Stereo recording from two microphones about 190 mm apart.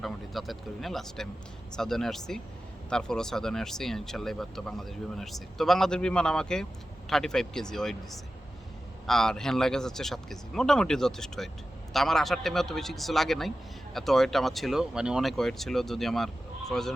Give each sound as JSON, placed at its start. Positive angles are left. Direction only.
{"t": 0.0, "sound": "speech", "side_deg": 0}